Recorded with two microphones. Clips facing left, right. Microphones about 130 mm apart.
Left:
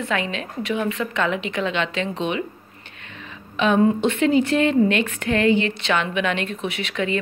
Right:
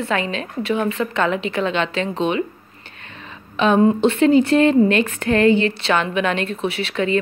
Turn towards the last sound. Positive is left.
turn(degrees=-35)  # may be behind; listen again after turning